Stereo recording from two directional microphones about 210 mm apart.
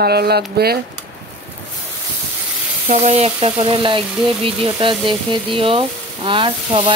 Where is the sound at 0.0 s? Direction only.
50° right (ahead or behind).